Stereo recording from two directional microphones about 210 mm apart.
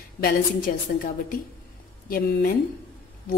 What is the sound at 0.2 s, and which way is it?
A woman's voice, 40° left (ahead or behind).